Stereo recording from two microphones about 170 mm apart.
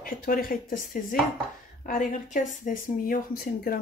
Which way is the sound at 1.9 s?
50° left (ahead or behind).